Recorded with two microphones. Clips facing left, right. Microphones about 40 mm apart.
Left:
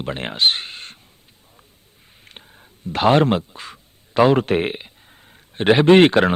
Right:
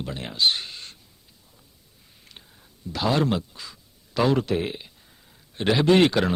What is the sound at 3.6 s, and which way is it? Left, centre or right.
Speech, left.